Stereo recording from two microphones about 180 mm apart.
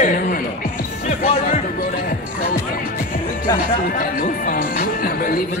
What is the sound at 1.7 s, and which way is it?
Music, 55° left (ahead or behind).